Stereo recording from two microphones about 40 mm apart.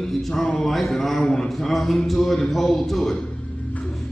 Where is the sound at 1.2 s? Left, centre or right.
Centre.